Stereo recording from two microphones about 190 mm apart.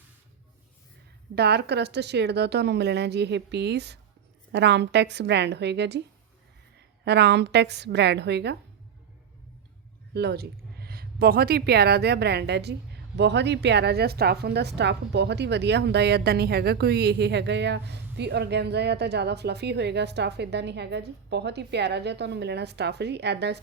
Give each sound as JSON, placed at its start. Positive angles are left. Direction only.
{"t": 1.4, "sound": "a woman's voice", "side_deg": -60}
{"t": 10.2, "sound": "a woman's voice", "side_deg": -55}